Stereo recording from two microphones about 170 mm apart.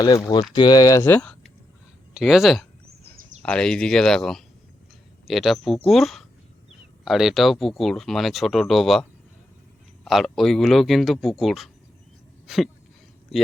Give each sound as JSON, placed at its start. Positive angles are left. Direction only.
{"t": 0.0, "sound": "speech", "side_deg": 20}
{"t": 2.1, "sound": "speech", "side_deg": 0}
{"t": 12.5, "sound": "a sound", "side_deg": -5}